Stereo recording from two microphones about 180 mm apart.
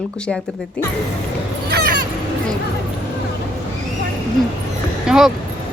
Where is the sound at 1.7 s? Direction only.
60° right (ahead or behind).